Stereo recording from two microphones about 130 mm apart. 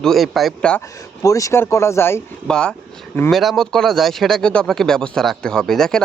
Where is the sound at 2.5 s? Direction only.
5° left (ahead or behind).